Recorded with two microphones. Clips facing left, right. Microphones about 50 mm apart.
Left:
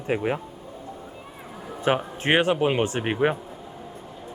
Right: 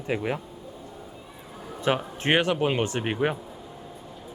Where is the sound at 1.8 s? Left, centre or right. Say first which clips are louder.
Left 2 dB; centre.